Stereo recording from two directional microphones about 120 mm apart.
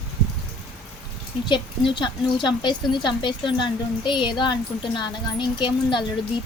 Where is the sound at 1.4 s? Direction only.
40° left (ahead or behind).